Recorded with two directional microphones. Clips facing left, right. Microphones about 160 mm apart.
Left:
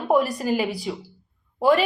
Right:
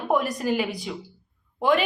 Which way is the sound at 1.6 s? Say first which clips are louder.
Left 3 dB; 5° left (ahead or behind).